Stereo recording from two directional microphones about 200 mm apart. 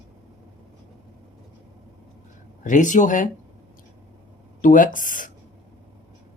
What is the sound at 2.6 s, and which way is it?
Speech, 40° left (ahead or behind).